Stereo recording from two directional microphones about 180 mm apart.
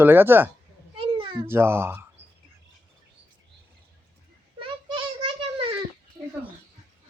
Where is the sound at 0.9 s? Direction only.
30° right (ahead or behind).